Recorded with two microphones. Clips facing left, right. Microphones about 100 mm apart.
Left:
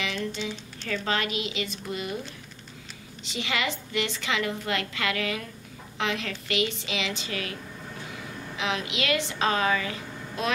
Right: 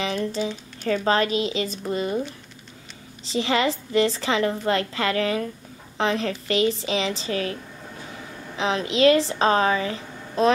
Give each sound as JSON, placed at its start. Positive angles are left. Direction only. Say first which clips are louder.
{"t": 0.0, "sound": "a woman's voice", "louder": "right 6 dB", "side_deg": -35}
{"t": 3.3, "sound": "a woman's voice", "louder": "right 8 dB", "side_deg": -35}
{"t": 8.5, "sound": "a woman's voice", "louder": "right 8 dB", "side_deg": -35}